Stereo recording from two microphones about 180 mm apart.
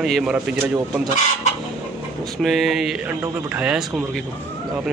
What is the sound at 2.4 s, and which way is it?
Speech, centre (ahead or behind).